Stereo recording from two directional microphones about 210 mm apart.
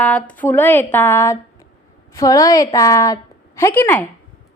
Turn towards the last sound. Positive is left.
turn(degrees=10)  # may be behind; listen again after turning